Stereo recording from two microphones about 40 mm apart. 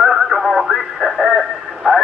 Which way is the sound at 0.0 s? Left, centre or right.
Centre.